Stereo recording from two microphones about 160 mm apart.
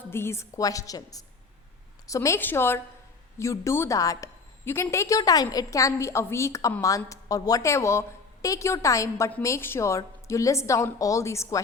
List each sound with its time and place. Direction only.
0.1 s a woman's voice: 15° left (ahead or behind)